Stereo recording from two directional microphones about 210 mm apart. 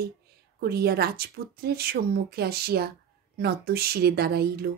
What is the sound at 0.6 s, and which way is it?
Speech, 50° right (ahead or behind).